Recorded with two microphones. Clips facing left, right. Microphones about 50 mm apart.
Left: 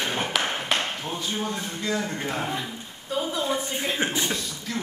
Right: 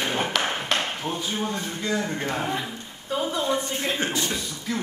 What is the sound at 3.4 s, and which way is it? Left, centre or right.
Speech, centre.